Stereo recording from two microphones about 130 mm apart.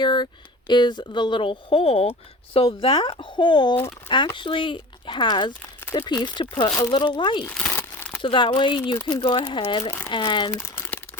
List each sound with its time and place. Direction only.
0.0 s a sound: 35° left (ahead or behind)
0.7 s speech: 35° left (ahead or behind)
2.8 s speech: 35° left (ahead or behind)
7.4 s crumpling: 10° left (ahead or behind)
8.2 s speech: 40° left (ahead or behind)
10.6 s crumpling: 15° left (ahead or behind)